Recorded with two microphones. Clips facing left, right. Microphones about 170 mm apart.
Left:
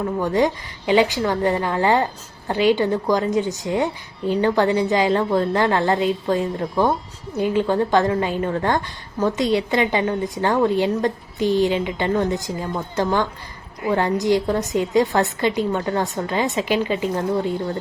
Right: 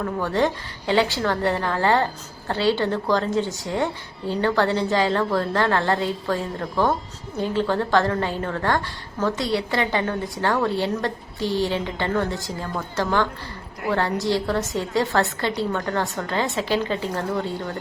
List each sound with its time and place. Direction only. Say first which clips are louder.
0.0 s a woman's voice: left 3 dB; 15° left (ahead or behind)